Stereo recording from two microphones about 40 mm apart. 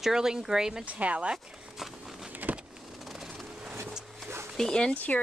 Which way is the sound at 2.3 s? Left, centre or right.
Right.